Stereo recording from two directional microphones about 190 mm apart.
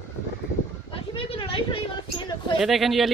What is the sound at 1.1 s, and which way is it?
Speech, 30° left (ahead or behind).